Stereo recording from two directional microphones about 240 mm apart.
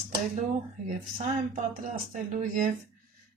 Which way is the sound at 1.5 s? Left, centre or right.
Right.